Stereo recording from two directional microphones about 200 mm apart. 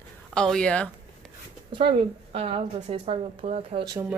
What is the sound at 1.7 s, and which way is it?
A woman's voice, 25° right (ahead or behind).